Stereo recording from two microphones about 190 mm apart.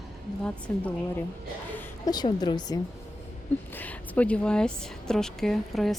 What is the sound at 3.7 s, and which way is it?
A woman's voice, 10° left (ahead or behind).